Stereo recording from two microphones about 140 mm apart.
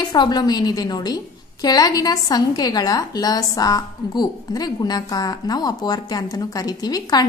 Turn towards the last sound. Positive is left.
turn(degrees=30)  # may be behind; listen again after turning